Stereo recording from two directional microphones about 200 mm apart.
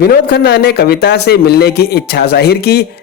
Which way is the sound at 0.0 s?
55° left (ahead or behind).